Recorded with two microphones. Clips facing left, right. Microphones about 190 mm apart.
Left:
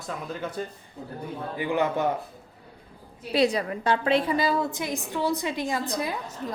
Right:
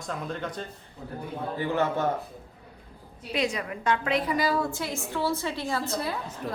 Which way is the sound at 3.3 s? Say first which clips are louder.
Left 6 dB; 35° left (ahead or behind).